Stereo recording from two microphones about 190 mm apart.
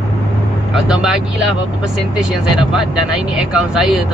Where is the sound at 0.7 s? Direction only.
5° right (ahead or behind).